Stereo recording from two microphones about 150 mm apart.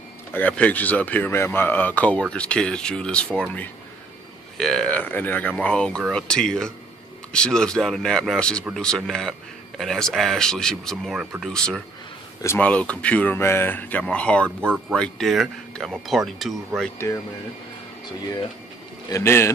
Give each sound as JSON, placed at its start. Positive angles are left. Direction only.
{"t": 0.3, "sound": "speech", "side_deg": 10}
{"t": 14.6, "sound": "speech", "side_deg": -15}
{"t": 15.0, "sound": "speech", "side_deg": 0}
{"t": 19.0, "sound": "speech", "side_deg": 20}